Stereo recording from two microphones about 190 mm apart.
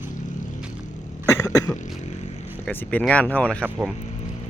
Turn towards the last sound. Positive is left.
turn(degrees=5)  # may be behind; listen again after turning